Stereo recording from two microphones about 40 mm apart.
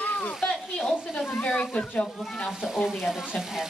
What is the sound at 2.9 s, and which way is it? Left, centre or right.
Speech, centre.